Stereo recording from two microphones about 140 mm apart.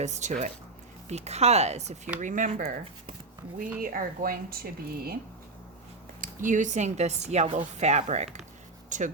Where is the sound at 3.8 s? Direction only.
80° right.